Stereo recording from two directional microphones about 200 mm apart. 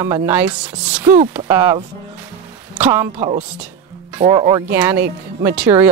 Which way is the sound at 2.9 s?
25° right (ahead or behind).